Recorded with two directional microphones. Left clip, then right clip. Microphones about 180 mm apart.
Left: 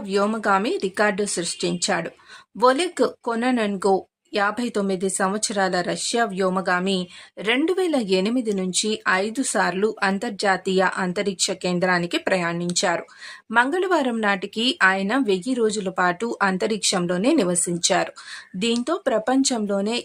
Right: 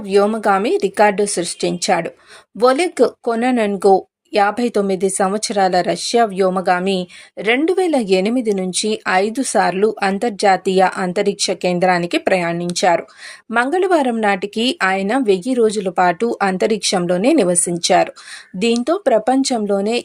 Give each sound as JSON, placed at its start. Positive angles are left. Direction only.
{"t": 0.1, "sound": "a woman's voice", "side_deg": -15}